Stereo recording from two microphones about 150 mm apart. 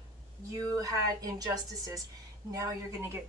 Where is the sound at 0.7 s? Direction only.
25° right (ahead or behind).